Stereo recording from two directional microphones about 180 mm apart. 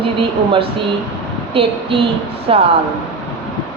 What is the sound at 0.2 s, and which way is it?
Speech, 30° right (ahead or behind).